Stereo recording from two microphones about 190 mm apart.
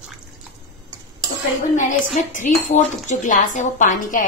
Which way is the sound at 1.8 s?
40° left (ahead or behind).